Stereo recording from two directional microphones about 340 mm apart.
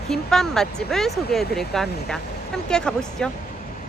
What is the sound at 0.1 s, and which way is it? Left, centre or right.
Speech, centre.